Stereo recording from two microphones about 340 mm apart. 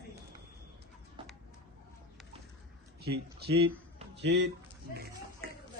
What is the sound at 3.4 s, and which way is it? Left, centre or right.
Speech, right.